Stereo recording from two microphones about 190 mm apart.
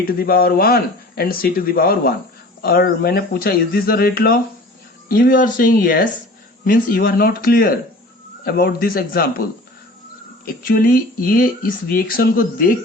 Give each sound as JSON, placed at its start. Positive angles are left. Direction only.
{"t": 0.0, "sound": "speech", "side_deg": 50}
{"t": 10.4, "sound": "speech", "side_deg": 50}